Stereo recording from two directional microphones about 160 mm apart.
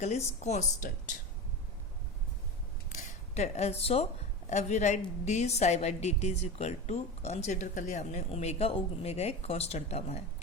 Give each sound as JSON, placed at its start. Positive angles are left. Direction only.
{"t": 0.0, "sound": "a woman's voice", "side_deg": 45}
{"t": 2.9, "sound": "a woman's voice", "side_deg": 45}